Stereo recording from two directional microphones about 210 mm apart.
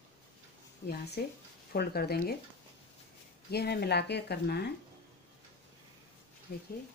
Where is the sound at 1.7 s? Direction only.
50° left (ahead or behind).